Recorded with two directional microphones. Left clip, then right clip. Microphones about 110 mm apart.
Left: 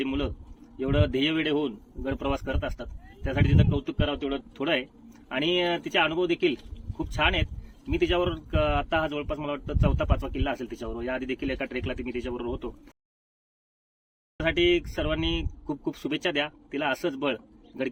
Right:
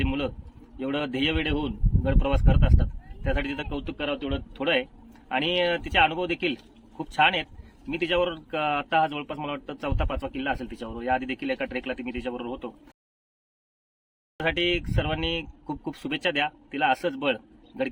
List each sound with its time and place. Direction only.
0.0 s a sound: 25° right (ahead or behind)
0.8 s speech: 25° right (ahead or behind)
14.3 s speech: 30° right (ahead or behind)